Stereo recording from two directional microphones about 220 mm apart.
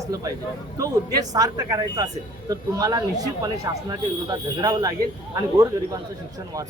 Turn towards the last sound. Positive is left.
turn(degrees=-15)  # may be behind; listen again after turning